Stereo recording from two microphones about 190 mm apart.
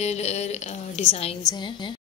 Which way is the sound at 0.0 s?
35° left (ahead or behind).